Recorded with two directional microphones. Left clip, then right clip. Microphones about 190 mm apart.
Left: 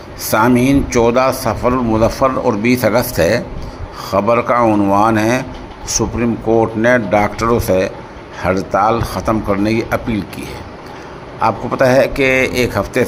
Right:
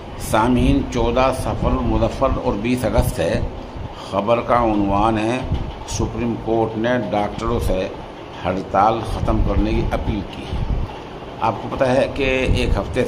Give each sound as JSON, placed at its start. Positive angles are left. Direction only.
{"t": 0.3, "sound": "a man's voice", "side_deg": 25}
{"t": 11.4, "sound": "a man's voice", "side_deg": 25}